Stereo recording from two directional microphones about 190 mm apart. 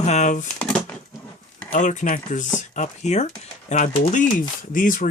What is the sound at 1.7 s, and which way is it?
Speech, 40° left (ahead or behind).